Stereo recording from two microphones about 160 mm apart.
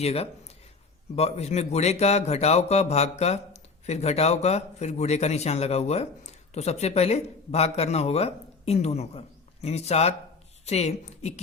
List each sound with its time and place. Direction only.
0.0 s a woman's voice: 40° left (ahead or behind)